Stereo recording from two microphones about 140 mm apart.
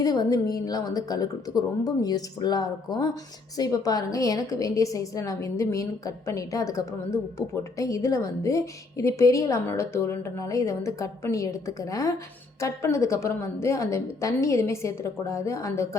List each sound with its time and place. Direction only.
0.0 s a woman's voice: 25° left (ahead or behind)